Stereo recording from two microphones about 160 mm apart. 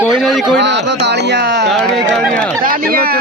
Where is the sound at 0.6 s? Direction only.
90° right.